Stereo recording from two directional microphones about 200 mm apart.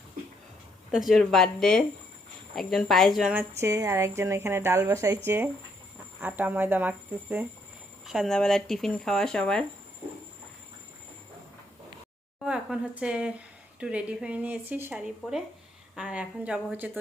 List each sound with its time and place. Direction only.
0.9 s speech: centre (ahead or behind)
3.6 s a woman's voice: 15° right (ahead or behind); by 9.6 s 5° left (ahead or behind)
12.4 s speech: 5° right (ahead or behind)